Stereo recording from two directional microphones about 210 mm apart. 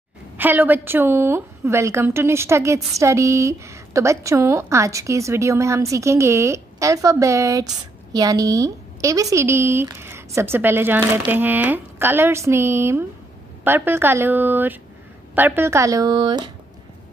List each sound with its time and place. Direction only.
0.4 s a woman's voice: 10° right (ahead or behind)